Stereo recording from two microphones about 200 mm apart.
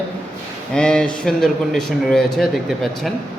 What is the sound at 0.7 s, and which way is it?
Speech, 5° left (ahead or behind).